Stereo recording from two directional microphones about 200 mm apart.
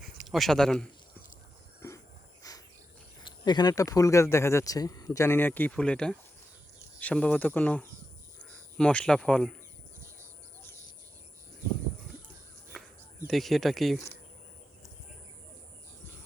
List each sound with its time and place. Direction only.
0.3 s speech: centre (ahead or behind)
1.8 s a sound: 15° left (ahead or behind)
2.4 s cricket: 20° left (ahead or behind)
3.4 s speech: 20° left (ahead or behind); by 9.6 s 5° left (ahead or behind)
13.2 s speech: centre (ahead or behind)